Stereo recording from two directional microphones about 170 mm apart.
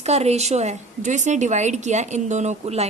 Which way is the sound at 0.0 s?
40° right (ahead or behind).